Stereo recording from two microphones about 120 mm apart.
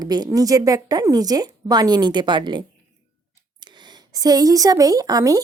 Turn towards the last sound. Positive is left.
turn(degrees=-30)  # may be behind; listen again after turning